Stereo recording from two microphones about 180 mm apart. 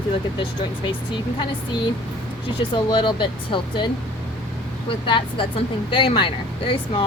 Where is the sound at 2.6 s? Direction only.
25° left (ahead or behind).